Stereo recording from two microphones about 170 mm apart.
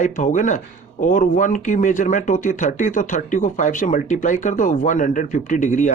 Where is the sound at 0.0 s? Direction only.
50° left (ahead or behind).